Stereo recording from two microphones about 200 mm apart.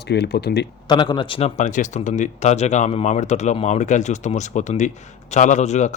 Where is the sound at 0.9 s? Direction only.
20° left (ahead or behind).